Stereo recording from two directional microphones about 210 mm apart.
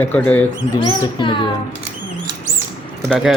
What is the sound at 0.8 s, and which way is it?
Speech, 25° left (ahead or behind).